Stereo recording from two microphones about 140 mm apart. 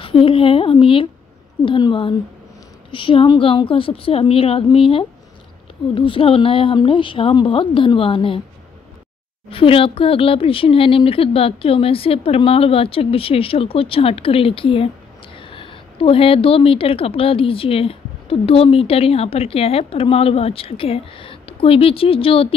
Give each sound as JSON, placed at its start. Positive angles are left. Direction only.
{"t": 0.0, "sound": "speech", "side_deg": 40}
{"t": 9.5, "sound": "a woman's voice", "side_deg": 40}